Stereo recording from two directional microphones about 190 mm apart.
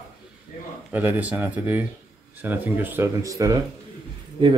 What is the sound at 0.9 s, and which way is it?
Speech, 10° right (ahead or behind).